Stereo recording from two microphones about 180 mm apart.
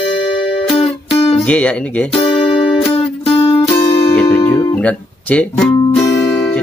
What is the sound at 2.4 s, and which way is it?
Music, 30° left (ahead or behind).